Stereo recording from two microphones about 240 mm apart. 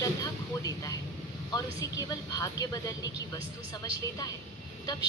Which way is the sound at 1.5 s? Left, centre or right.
Centre.